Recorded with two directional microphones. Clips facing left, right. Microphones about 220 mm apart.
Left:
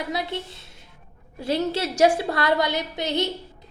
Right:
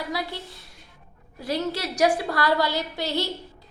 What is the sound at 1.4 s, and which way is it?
A woman's voice, 25° left (ahead or behind).